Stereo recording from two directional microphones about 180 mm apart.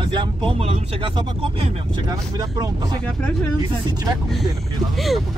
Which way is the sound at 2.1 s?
20° right (ahead or behind).